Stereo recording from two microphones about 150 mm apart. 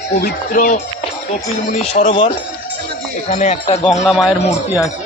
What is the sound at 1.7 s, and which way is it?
Speech, 45° left (ahead or behind).